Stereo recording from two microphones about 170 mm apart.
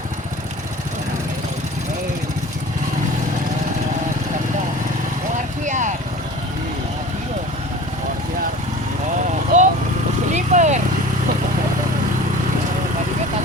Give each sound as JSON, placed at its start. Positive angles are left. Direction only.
{"t": 5.6, "sound": "vehicle", "side_deg": -45}
{"t": 9.5, "sound": "vehicle", "side_deg": -45}